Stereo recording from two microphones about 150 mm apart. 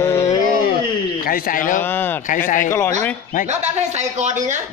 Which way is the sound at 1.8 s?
15° left (ahead or behind).